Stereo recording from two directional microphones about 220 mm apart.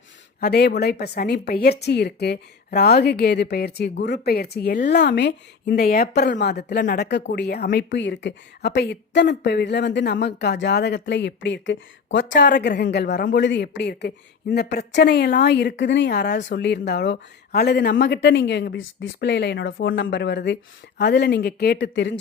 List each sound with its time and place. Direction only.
0.3 s a woman's voice: 45° left (ahead or behind)